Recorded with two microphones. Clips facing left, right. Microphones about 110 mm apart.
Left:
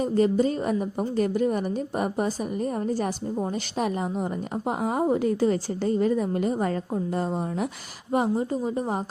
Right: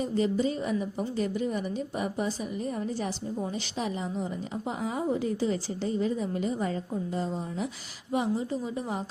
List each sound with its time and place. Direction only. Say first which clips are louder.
0.0 s a woman's voice: left 5 dB; 45° left (ahead or behind)
8.1 s a woman's voice: left 4 dB; 50° left (ahead or behind)